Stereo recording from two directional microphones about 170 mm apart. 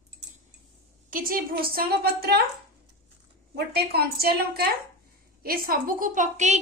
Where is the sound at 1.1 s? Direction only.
55° right (ahead or behind).